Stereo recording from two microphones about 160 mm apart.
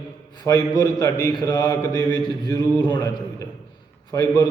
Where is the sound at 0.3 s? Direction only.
25° left (ahead or behind).